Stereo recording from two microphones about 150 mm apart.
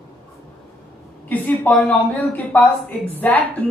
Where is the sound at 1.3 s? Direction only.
5° left (ahead or behind).